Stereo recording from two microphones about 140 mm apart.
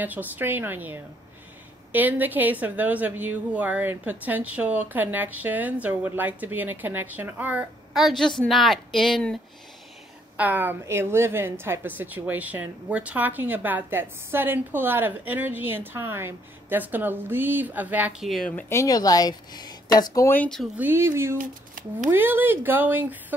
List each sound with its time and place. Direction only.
0.0 s a woman's voice: 10° right (ahead or behind)
10.3 s a woman's voice: 10° right (ahead or behind)
18.3 s speech: 5° left (ahead or behind)
18.7 s speech: 25° left (ahead or behind)
20.3 s speech: 5° left (ahead or behind)
20.7 s a woman's voice: 15° right (ahead or behind)
21.4 s speech: 75° right (ahead or behind)
22.1 s a woman's voice: 15° right (ahead or behind)